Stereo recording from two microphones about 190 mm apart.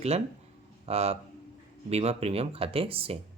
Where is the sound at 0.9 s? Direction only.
35° right (ahead or behind).